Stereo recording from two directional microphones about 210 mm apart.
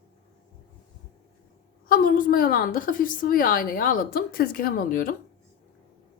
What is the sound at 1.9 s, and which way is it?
A woman's voice, 40° left (ahead or behind).